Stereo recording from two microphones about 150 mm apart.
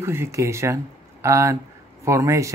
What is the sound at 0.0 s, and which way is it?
Speech, 20° right (ahead or behind).